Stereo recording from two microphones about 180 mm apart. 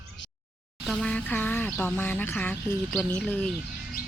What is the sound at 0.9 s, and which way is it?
Speech, centre (ahead or behind).